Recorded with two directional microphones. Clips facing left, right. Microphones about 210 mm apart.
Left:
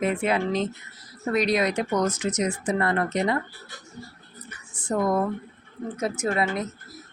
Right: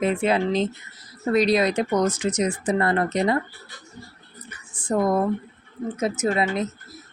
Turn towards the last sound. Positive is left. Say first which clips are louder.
# right 3 dB
turn(degrees=-25)  # may be behind; listen again after turning